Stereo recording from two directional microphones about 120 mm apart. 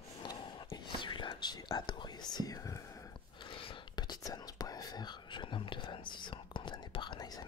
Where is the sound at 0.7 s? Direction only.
40° left (ahead or behind).